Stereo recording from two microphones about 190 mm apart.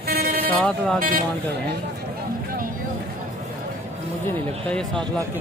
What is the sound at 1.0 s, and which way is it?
Speech, 45° right (ahead or behind).